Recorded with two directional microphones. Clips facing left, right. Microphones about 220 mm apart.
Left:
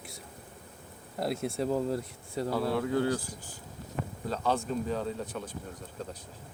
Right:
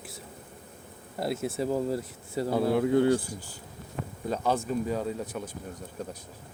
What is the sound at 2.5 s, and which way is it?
Speech, 20° right (ahead or behind).